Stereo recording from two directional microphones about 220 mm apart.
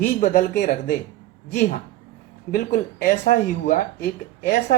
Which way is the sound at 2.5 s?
40° left (ahead or behind).